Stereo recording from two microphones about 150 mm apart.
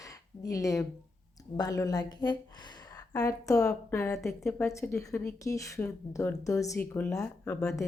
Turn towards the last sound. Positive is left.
turn(degrees=10)  # may be behind; listen again after turning